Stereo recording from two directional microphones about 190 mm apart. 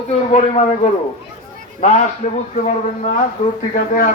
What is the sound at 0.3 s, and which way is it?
Speech, 35° left (ahead or behind).